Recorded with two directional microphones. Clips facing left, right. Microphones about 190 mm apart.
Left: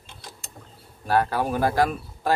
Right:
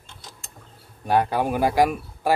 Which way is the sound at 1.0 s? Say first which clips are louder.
Right 1 dB; 15° right (ahead or behind).